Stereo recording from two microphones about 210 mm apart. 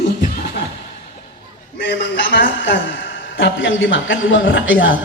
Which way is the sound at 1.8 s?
55° left (ahead or behind).